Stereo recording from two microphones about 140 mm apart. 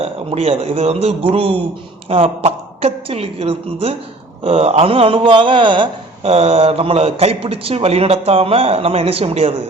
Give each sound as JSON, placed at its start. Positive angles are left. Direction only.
{"t": 0.0, "sound": "a man's voice", "side_deg": -45}